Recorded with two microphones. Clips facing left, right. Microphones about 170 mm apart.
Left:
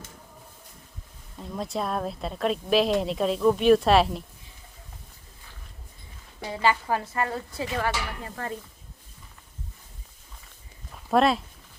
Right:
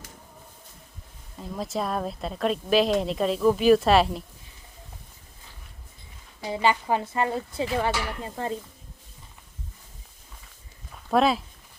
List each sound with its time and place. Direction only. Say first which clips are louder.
1.4 s a woman's voice: right 1 dB; centre (ahead or behind)
6.5 s speech: right 1 dB; 20° right (ahead or behind)
10.9 s speech: even; centre (ahead or behind)